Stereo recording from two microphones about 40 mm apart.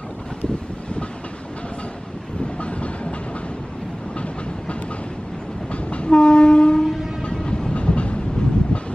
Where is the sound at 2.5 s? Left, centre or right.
Left.